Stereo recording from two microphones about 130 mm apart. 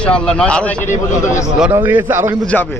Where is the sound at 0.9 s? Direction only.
20° left (ahead or behind).